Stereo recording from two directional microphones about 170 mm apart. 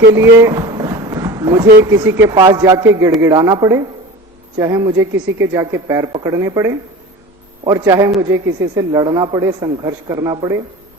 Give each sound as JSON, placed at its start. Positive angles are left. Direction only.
{"t": 0.2, "sound": "a sound", "side_deg": -20}
{"t": 1.8, "sound": "speech", "side_deg": -15}
{"t": 2.3, "sound": "speech", "side_deg": -25}